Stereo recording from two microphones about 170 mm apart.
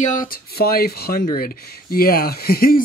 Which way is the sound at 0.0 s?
50° left (ahead or behind).